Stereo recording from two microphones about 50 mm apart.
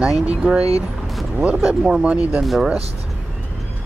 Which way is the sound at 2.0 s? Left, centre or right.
Right.